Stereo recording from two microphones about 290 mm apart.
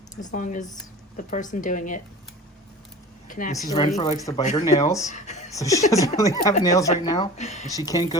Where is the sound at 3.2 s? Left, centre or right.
Left.